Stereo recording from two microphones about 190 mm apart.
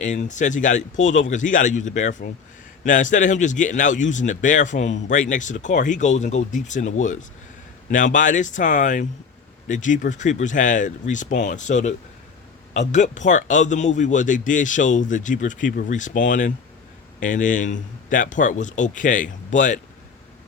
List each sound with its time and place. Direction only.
0.0 s a man's voice: 40° left (ahead or behind)